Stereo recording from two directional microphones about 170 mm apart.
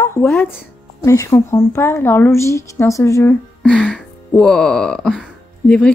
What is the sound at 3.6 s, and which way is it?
Music, 5° left (ahead or behind).